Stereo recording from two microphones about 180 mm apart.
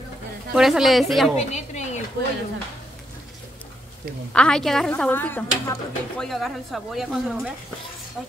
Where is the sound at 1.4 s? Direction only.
40° left (ahead or behind).